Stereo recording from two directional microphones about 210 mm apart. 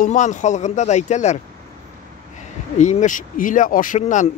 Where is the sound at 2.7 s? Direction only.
35° left (ahead or behind).